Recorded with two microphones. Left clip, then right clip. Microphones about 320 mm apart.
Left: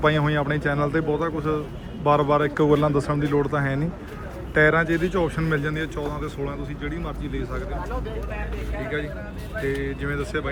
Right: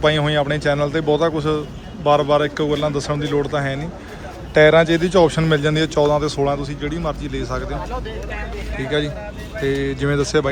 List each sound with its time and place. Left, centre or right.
0.0 s speech: centre
9.6 s speech: centre